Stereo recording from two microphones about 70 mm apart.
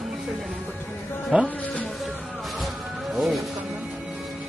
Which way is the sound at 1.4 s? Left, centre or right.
Left.